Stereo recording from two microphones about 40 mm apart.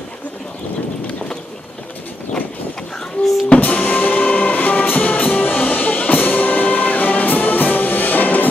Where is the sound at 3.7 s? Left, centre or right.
Left.